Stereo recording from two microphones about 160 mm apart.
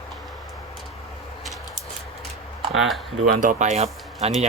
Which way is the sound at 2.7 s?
Centre (ahead or behind).